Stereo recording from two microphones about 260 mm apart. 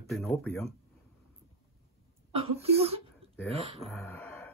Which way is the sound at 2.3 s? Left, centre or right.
Right.